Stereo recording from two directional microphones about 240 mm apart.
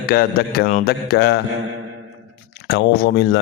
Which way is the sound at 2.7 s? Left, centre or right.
Left.